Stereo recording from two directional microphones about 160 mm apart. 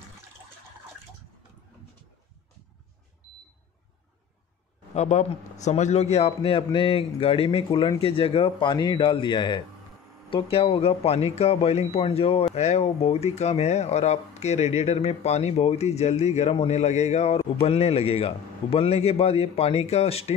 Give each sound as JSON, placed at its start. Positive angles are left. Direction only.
{"t": 4.9, "sound": "speech", "side_deg": 45}